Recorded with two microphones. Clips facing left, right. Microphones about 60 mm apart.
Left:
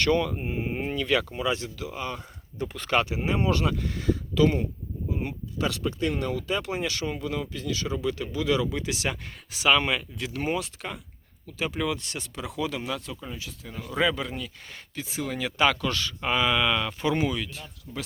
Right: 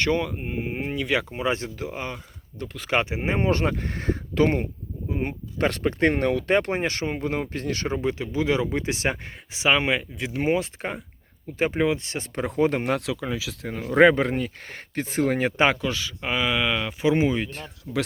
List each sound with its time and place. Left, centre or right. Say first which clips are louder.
0.0 s speech: even; right
0.3 s speech: even; centre; by 2.1 s right
2.1 s speech: left 3 dB; centre
2.9 s speech: right 1 dB; right
8.2 s speech: right 1 dB; right
12.3 s speech: right 9 dB; right
13.7 s speech: right 9 dB; right
15.8 s speech: right 1 dB; centre; by 17.5 s right
17.5 s speech: right 8 dB; right